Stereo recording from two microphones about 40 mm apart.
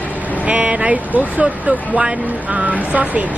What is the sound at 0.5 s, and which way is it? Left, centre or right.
Speech, right.